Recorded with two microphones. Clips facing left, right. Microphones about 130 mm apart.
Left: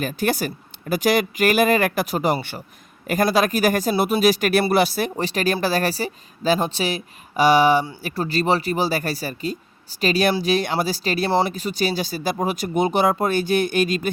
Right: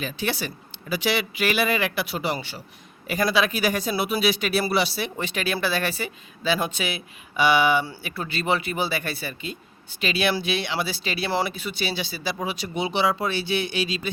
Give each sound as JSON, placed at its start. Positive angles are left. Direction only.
{"t": 0.0, "sound": "speech", "side_deg": 45}